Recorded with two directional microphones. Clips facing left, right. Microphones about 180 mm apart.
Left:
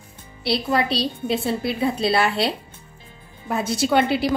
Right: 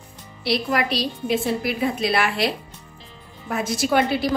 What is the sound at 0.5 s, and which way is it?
A woman's voice, 30° left (ahead or behind).